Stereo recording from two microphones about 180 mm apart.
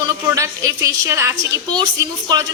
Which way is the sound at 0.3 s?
15° right (ahead or behind).